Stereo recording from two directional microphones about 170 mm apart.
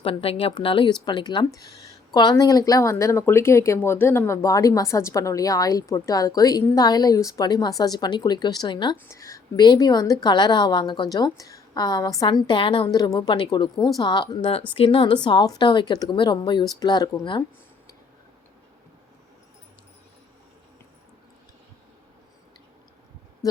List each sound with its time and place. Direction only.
0.0 s speech: 30° left (ahead or behind)